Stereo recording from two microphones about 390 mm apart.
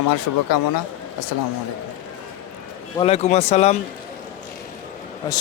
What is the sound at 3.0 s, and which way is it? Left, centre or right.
Speech, centre.